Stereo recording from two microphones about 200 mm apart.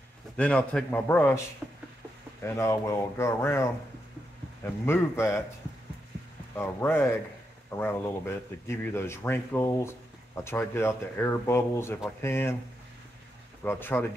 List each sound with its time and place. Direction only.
0.4 s speech: 5° left (ahead or behind)
1.6 s a sound: 5° right (ahead or behind)
2.4 s speech: 15° left (ahead or behind)
4.6 s speech: 10° left (ahead or behind)
6.5 s speech: 10° left (ahead or behind)
13.7 s speech: 10° left (ahead or behind)